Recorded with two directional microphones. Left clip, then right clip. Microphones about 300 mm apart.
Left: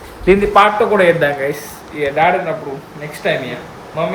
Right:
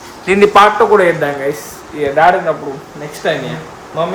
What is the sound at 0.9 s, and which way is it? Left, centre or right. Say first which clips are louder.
Speech: right 1 dB; centre.